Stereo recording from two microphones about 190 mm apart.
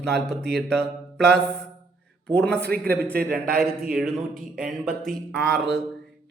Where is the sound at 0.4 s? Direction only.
60° right (ahead or behind).